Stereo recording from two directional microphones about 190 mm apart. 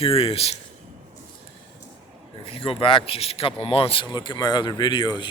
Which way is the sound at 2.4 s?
30° left (ahead or behind).